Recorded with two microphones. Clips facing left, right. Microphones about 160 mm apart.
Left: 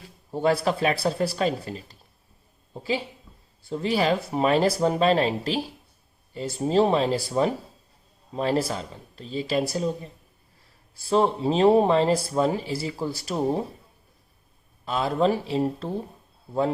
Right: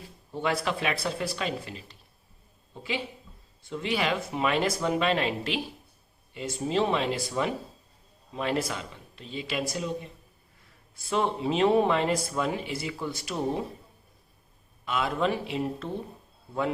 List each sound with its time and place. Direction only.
0.3 s speech: 40° left (ahead or behind)
14.8 s speech: 35° left (ahead or behind)